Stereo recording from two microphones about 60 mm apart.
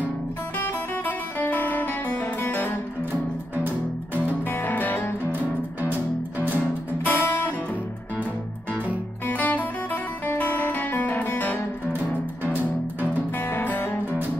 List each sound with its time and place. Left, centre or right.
0.6 s music: left
3.1 s music: right
4.5 s music: left
5.3 s music: right
7.1 s music: left
9.3 s music: left
13.5 s music: left